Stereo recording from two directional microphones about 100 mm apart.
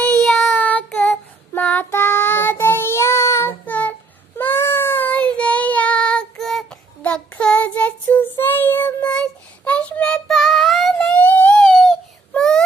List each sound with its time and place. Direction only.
0.3 s child singing: 20° left (ahead or behind)
3.7 s child singing: 15° left (ahead or behind)
11.7 s a sound: centre (ahead or behind)
12.3 s wail: 5° left (ahead or behind)